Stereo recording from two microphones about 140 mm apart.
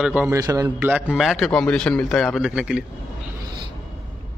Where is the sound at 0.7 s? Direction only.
10° right (ahead or behind).